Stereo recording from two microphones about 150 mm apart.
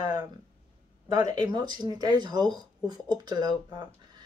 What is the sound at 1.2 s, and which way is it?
Speech, 30° right (ahead or behind).